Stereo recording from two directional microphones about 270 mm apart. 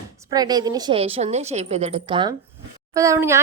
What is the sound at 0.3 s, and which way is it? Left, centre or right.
A woman's voice, centre.